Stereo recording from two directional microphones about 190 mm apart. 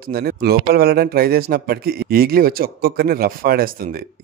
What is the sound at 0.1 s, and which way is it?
A man's voice, 55° right (ahead or behind).